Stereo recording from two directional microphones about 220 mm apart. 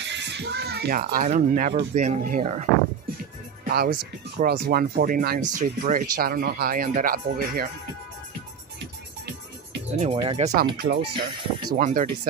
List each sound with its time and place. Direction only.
0.0 s a child's voice: 50° right (ahead or behind); by 2.6 s 35° right (ahead or behind)
3.6 s speech: 40° right (ahead or behind)
10.1 s speech: 25° right (ahead or behind)
11.8 s speech: 35° right (ahead or behind)